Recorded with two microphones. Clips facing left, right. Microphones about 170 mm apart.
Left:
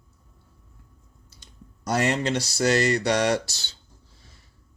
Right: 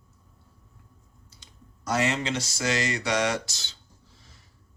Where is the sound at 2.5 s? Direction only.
35° left (ahead or behind).